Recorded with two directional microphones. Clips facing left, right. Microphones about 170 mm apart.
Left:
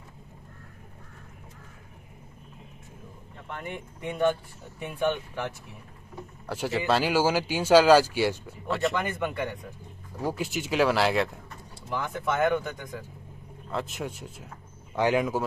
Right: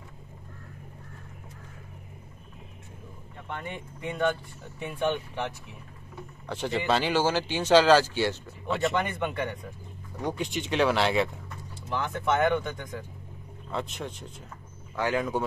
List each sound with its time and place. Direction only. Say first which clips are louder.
3.5 s speech: left 1 dB; 5° left (ahead or behind)
6.4 s speech: left 1 dB; 5° left (ahead or behind)